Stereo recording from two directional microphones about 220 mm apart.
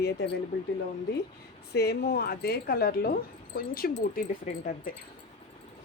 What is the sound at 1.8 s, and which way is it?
Speech, 45° left (ahead or behind).